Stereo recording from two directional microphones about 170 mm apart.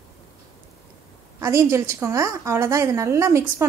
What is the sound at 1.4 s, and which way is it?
A woman's voice, 15° right (ahead or behind).